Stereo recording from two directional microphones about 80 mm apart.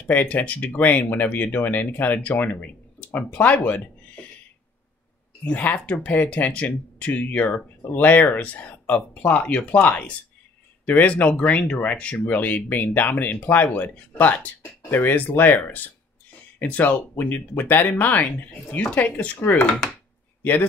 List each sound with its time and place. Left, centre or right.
0.0 s speech: centre
5.4 s speech: centre